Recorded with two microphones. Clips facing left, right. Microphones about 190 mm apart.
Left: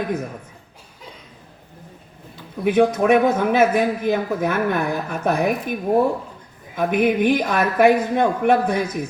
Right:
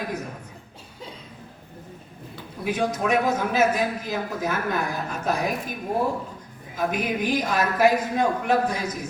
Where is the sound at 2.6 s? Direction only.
55° left (ahead or behind).